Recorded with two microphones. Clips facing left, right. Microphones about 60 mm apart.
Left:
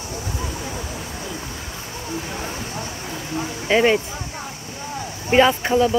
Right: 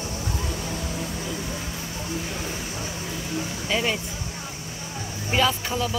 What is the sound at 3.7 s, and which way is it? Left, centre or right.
Speech, left.